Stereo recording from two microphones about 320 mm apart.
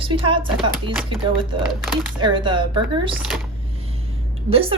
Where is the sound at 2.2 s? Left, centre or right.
Centre.